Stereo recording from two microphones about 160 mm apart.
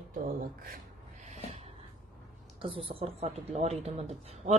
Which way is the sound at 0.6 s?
55° right (ahead or behind).